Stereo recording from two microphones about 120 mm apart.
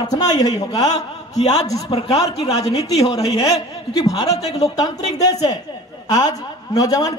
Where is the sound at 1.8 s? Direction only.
50° left (ahead or behind).